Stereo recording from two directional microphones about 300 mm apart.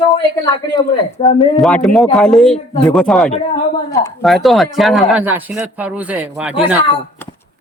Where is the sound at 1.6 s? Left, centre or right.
Centre.